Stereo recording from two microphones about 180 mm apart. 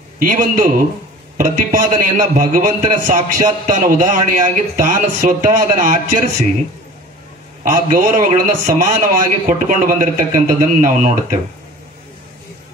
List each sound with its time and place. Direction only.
0.2 s a man's voice: 50° right (ahead or behind)
7.6 s a man's voice: 50° right (ahead or behind)